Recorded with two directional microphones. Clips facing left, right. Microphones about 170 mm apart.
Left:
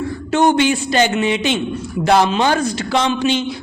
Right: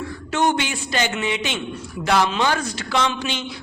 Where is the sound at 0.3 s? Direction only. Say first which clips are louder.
Left 7 dB; 30° left (ahead or behind).